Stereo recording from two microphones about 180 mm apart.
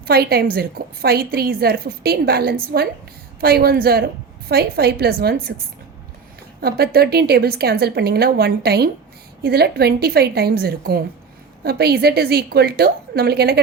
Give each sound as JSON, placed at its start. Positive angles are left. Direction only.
{"t": 0.1, "sound": "a woman's voice", "side_deg": -60}
{"t": 6.6, "sound": "a woman's voice", "side_deg": -60}